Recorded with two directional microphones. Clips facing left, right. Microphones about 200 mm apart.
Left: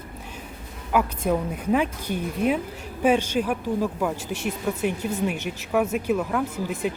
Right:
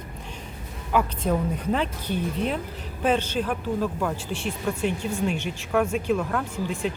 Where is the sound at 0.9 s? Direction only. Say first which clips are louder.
Left 1 dB; 10° left (ahead or behind).